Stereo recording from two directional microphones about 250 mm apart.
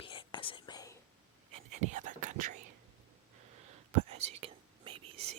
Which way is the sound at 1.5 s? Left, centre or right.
Right.